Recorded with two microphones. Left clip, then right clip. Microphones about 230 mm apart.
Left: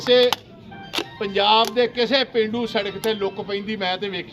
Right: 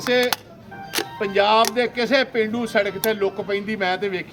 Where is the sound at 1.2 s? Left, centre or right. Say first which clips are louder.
Right 1 dB; centre.